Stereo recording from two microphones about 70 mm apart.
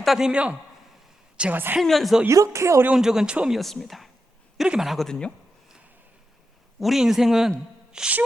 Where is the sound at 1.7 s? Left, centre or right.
Centre.